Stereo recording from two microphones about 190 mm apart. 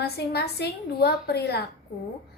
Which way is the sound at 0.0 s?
60° left (ahead or behind).